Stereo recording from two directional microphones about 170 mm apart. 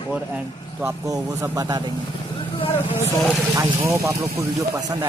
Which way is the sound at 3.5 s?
15° right (ahead or behind).